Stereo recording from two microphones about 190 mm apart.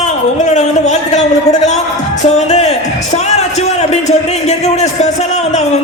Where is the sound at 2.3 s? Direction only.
35° left (ahead or behind).